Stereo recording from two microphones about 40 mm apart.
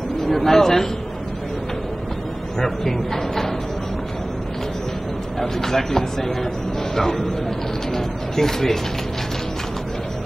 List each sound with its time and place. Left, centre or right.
0.2 s speech: centre
2.6 s speech: centre
5.4 s speech: centre